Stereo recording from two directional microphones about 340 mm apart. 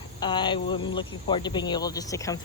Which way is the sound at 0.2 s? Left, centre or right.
Centre.